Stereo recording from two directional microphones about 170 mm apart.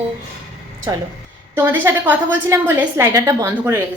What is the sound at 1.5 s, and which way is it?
A woman's voice, 10° right (ahead or behind).